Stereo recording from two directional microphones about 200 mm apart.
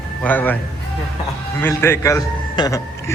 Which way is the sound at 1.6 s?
10° left (ahead or behind).